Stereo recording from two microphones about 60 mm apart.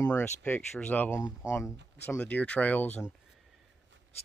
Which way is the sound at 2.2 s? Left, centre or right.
Left.